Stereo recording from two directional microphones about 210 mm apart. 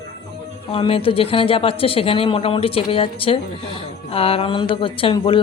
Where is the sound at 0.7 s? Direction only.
25° left (ahead or behind).